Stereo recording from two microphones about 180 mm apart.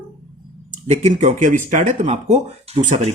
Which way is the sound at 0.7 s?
40° right (ahead or behind).